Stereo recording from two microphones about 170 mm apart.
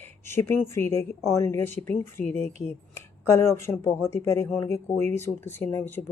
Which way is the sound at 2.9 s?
15° left (ahead or behind).